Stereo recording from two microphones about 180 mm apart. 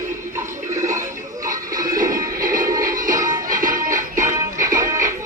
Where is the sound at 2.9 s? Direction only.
50° right (ahead or behind).